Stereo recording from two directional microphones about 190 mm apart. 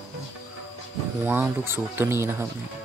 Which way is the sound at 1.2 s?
10° right (ahead or behind).